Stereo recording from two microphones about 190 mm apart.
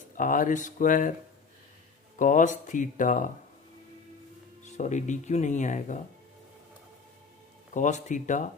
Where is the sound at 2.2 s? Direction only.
40° left (ahead or behind).